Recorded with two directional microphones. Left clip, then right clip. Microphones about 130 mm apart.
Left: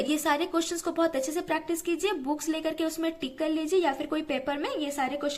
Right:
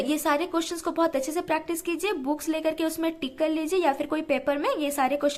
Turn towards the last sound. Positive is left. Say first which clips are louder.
# right 5 dB
turn(degrees=-45)  # may be behind; listen again after turning